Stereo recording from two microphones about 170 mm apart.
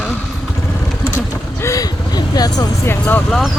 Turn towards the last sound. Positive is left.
turn(degrees=10)  # may be behind; listen again after turning